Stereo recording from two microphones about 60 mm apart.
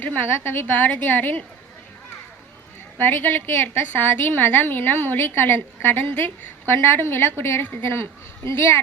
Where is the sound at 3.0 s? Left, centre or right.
Left.